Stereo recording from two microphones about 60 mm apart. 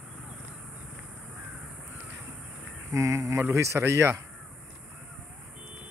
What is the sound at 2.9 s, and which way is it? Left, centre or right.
Speech, right.